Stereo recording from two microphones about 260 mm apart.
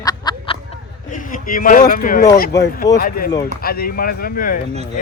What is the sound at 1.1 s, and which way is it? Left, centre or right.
Speech, left.